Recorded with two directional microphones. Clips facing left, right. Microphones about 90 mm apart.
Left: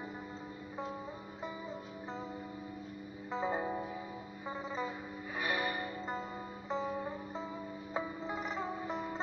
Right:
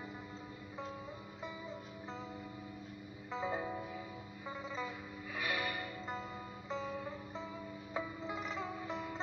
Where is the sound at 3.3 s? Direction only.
30° left (ahead or behind).